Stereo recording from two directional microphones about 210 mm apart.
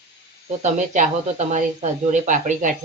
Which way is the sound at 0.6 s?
35° right (ahead or behind).